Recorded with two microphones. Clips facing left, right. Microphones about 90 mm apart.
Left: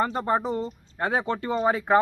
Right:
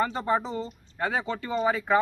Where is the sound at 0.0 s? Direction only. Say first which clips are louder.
Left 2 dB; 50° left (ahead or behind).